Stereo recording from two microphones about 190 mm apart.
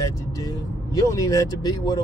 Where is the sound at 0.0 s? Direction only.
20° left (ahead or behind).